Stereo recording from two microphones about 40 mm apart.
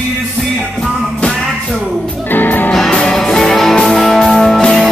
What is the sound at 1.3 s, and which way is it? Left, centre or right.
Music, centre.